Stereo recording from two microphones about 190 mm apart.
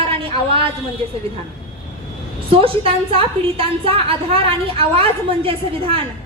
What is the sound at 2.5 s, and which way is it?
A woman's voice, 30° right (ahead or behind).